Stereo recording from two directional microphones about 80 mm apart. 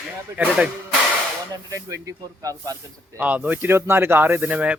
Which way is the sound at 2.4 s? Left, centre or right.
Right.